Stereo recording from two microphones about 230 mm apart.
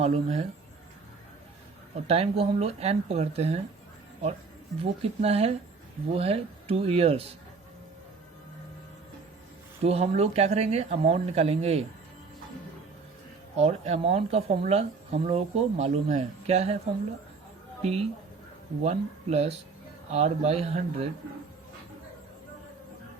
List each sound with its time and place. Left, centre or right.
0.0 s speech: right
2.0 s speech: right
4.8 s speech: right
9.8 s speech: right
13.6 s speech: right
17.8 s speech: right